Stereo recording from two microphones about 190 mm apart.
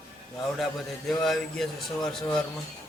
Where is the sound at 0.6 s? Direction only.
Centre (ahead or behind).